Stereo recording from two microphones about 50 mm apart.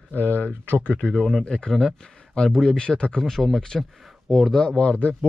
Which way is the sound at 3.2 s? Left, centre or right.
Centre.